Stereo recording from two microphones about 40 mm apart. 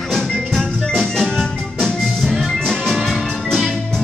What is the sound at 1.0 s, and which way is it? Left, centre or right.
Music, centre.